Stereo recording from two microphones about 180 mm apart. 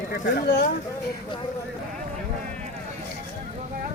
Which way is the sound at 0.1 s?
60° left (ahead or behind).